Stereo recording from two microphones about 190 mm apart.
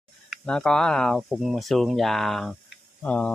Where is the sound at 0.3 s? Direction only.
5° left (ahead or behind).